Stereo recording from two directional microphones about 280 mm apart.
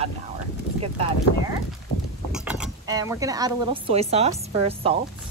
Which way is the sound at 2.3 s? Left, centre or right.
Centre.